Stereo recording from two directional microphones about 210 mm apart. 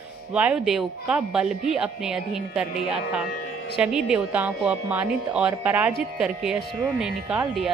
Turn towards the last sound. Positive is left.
turn(degrees=0)  # may be behind; listen again after turning